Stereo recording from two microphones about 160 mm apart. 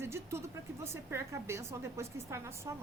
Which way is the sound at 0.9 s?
15° right (ahead or behind).